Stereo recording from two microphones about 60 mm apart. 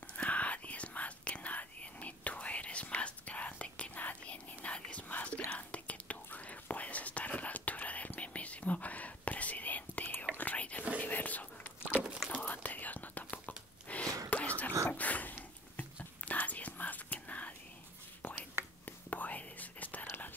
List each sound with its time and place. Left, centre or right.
0.2 s whispering: left
11.8 s a sound: centre
12.3 s whispering: left
14.0 s whispering: right
14.3 s whispering: left
18.9 s whispering: left